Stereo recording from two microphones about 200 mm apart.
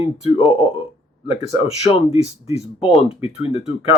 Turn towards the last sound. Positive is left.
turn(degrees=30)  # may be behind; listen again after turning